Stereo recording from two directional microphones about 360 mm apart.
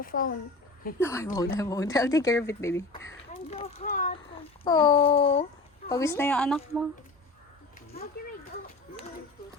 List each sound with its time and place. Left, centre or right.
0.0 s a child's voice: left
0.9 s speech: centre; by 4.1 s left
4.6 s speech: centre